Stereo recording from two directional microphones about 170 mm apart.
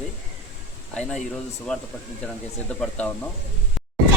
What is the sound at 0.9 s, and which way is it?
Speech, 5° left (ahead or behind).